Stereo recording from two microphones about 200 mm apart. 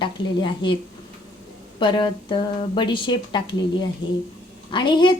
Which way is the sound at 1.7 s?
25° left (ahead or behind).